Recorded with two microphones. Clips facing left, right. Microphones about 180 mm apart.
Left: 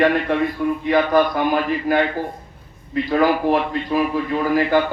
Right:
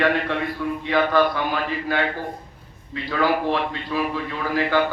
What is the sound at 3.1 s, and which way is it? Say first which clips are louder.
A man's voice: left 4 dB; 45° left (ahead or behind).